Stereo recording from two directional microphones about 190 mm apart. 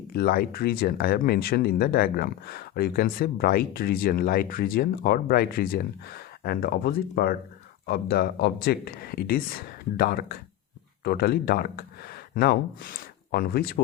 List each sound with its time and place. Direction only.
0.1 s speech: 50° left (ahead or behind)